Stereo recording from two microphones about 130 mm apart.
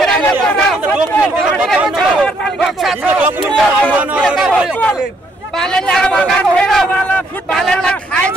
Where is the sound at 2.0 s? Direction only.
5° left (ahead or behind).